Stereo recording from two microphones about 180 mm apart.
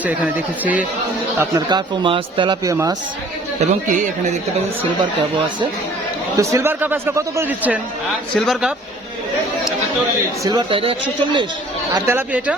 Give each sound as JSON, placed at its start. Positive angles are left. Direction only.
{"t": 0.0, "sound": "a man's voice", "side_deg": -10}
{"t": 1.4, "sound": "speech", "side_deg": -20}
{"t": 3.6, "sound": "speech", "side_deg": -40}
{"t": 6.3, "sound": "a man's voice", "side_deg": -15}
{"t": 10.4, "sound": "speech", "side_deg": -20}
{"t": 11.9, "sound": "a man's voice", "side_deg": -15}